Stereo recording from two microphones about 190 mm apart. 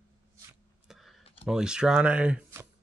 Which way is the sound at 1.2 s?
30° left (ahead or behind).